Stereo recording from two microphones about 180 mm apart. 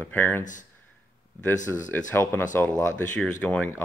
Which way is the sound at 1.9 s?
10° left (ahead or behind).